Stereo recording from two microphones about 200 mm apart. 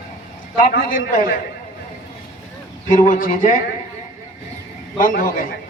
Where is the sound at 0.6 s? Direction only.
45° left (ahead or behind).